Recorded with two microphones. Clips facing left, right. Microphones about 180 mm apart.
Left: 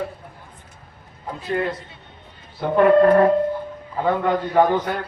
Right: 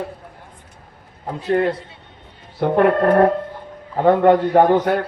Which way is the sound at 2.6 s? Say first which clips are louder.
Left 1 dB; 55° right (ahead or behind).